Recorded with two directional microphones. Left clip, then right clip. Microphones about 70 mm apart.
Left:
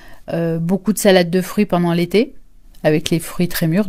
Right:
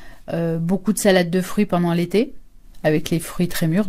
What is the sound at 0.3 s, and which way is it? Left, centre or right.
Speech, left.